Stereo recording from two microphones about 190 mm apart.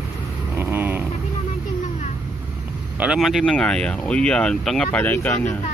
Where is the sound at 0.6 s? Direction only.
10° right (ahead or behind).